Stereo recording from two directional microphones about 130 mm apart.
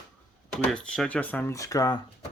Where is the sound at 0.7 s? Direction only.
5° left (ahead or behind); by 2.0 s 25° left (ahead or behind).